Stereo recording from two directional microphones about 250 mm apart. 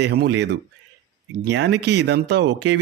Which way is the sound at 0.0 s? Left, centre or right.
Right.